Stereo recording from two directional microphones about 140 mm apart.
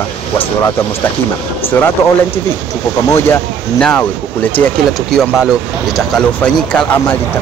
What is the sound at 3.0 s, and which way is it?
Speech, 15° left (ahead or behind).